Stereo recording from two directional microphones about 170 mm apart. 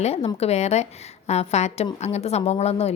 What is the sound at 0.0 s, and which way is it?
A woman's voice, 35° left (ahead or behind).